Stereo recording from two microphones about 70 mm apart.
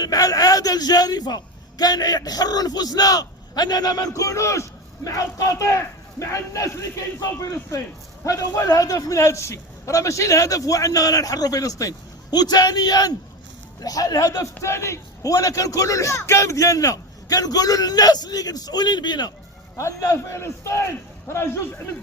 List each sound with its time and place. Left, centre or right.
0.0 s a man's voice: left
13.8 s a man's voice: left
14.6 s a man's voice: left
19.7 s a man's voice: left